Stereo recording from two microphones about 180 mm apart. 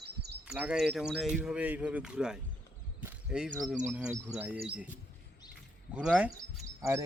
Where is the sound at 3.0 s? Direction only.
5° right (ahead or behind).